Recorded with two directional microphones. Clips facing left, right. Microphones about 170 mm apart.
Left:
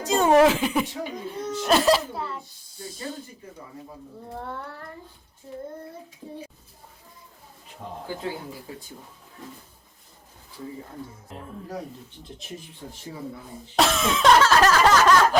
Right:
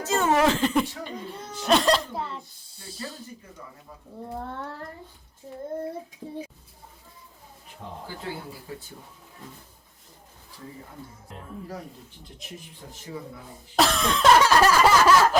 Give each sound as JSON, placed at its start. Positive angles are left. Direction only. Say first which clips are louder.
{"t": 0.0, "sound": "chuckle", "louder": "left 3 dB", "side_deg": 15}
{"t": 0.4, "sound": "speech", "louder": "left 1 dB", "side_deg": 10}
{"t": 13.7, "sound": "speech", "louder": "left 1 dB", "side_deg": 0}
{"t": 14.4, "sound": "a sound", "louder": "even", "side_deg": -10}